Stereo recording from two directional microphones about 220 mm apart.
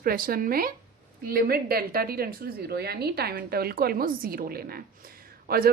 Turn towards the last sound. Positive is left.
turn(degrees=-40)  # may be behind; listen again after turning